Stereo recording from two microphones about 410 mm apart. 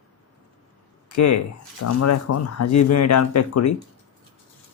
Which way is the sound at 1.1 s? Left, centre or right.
Left.